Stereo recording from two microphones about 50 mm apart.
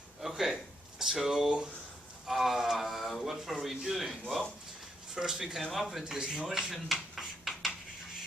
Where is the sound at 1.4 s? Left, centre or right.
Centre.